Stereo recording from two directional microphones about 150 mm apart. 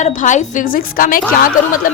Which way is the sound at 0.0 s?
55° left (ahead or behind).